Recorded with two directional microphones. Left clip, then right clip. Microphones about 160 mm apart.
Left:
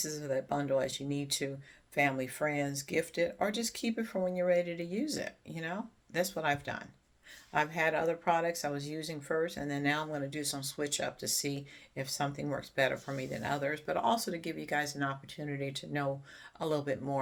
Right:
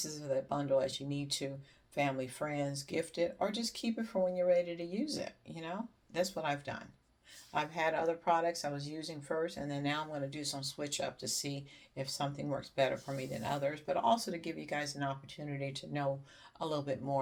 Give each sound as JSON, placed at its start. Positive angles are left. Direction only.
{"t": 0.0, "sound": "speech", "side_deg": 45}